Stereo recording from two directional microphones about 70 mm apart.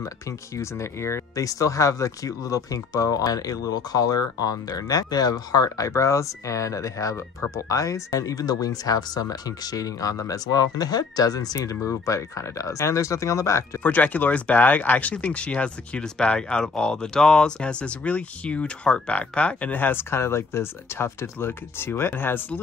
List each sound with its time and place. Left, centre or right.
0.6 s speech: left
13.8 s speech: left